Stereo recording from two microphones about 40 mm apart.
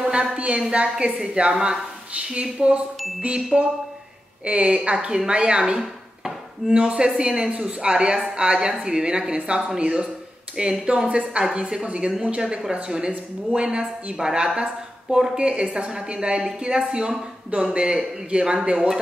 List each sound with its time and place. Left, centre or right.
0.0 s a woman's voice: right
3.3 s chime: right
4.5 s a woman's voice: right